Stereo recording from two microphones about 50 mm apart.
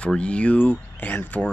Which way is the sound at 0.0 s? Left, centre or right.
Left.